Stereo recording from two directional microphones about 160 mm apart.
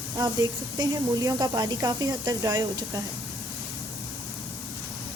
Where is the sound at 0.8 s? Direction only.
25° right (ahead or behind).